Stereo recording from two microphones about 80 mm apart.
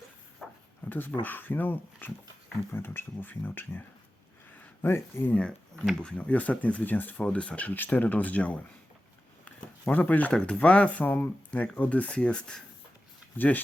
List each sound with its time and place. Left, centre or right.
0.4 s a sound: centre
0.9 s speech: left
5.3 s speech: centre
5.7 s speech: centre
6.0 s speech: centre
9.4 s a sound: centre
10.3 s speech: centre
13.3 s speech: left